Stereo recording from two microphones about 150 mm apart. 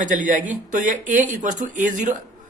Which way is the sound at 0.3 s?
55° right (ahead or behind).